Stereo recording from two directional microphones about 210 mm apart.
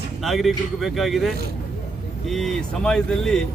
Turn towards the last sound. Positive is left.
turn(degrees=5)  # may be behind; listen again after turning